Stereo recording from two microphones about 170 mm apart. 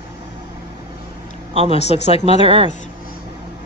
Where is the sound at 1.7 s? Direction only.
40° left (ahead or behind).